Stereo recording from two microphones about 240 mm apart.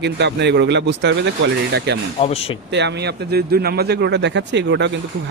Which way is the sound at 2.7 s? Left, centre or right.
Right.